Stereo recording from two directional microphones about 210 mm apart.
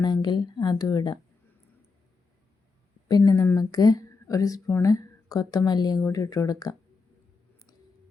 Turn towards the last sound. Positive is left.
turn(degrees=15)  # may be behind; listen again after turning